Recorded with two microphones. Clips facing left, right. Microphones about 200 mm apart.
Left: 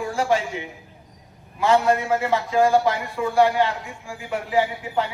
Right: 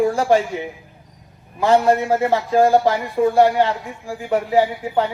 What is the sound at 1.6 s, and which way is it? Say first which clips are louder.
A man's voice: right 4 dB; 40° right (ahead or behind).